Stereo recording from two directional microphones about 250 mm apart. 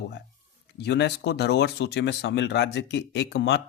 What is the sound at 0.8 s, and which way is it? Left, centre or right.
Speech, left.